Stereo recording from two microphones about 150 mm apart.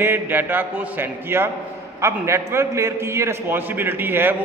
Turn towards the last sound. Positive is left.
turn(degrees=-15)  # may be behind; listen again after turning